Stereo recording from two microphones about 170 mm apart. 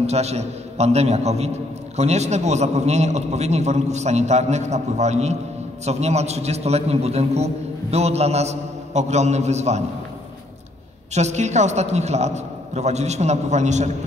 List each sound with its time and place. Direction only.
0.0 s a man's voice: 40° right (ahead or behind)
11.1 s a man's voice: 40° right (ahead or behind)